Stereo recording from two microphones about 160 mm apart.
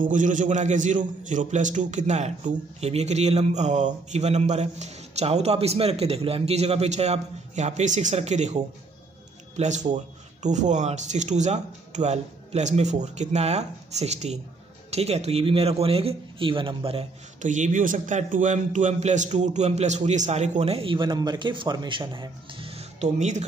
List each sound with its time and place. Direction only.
0.0 s a man's voice: 55° right (ahead or behind); by 17.0 s 35° right (ahead or behind)
17.4 s a man's voice: 50° right (ahead or behind)